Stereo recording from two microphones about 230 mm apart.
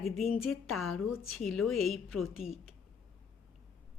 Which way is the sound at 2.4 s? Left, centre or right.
Left.